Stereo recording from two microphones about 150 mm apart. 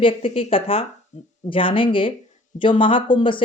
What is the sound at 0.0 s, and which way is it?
Speech, 35° left (ahead or behind).